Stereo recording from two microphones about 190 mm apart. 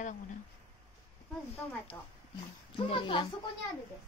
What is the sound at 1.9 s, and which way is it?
A woman's voice, 15° left (ahead or behind).